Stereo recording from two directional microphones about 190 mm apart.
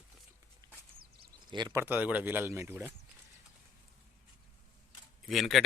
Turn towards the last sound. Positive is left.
turn(degrees=0)  # may be behind; listen again after turning